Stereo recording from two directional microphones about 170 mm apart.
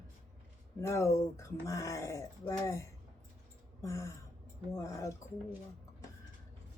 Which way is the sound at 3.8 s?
15° left (ahead or behind).